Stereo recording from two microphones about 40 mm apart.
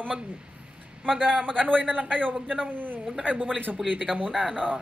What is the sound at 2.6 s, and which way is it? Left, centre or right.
Speech, right.